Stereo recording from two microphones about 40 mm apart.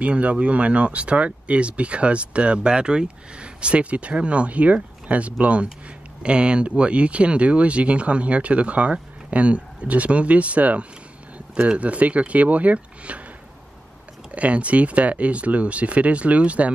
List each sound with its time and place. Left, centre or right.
0.0 s speech: right
14.3 s speech: right